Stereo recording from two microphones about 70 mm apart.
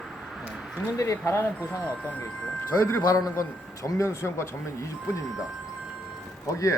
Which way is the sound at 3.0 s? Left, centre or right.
Left.